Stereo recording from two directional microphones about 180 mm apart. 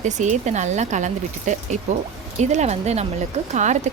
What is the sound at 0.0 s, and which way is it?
Speech, 40° right (ahead or behind).